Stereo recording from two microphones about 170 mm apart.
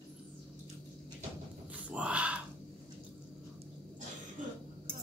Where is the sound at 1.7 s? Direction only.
5° right (ahead or behind).